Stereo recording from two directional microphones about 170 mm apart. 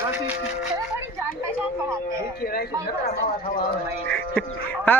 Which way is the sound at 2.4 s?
65° left (ahead or behind).